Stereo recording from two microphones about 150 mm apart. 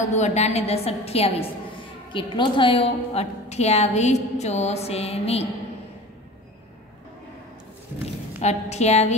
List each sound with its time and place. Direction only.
0.1 s a woman's voice: 50° left (ahead or behind)
2.1 s a woman's voice: 30° left (ahead or behind)
8.4 s a woman's voice: 45° left (ahead or behind)